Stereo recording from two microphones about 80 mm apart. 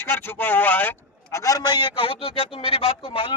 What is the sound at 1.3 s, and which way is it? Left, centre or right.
A man's voice, left.